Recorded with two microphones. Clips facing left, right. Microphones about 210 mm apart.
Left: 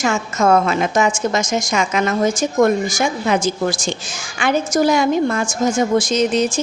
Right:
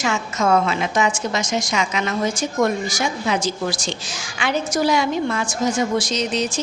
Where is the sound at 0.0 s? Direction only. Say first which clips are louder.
Left 4 dB; 45° left (ahead or behind).